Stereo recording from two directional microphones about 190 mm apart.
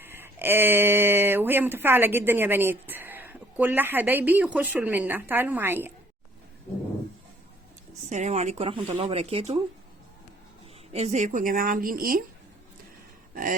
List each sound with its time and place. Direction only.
0.0 s speech: 10° right (ahead or behind)
8.1 s speech: 35° right (ahead or behind)
10.9 s a woman's voice: 35° right (ahead or behind)
13.3 s a sound: 45° right (ahead or behind)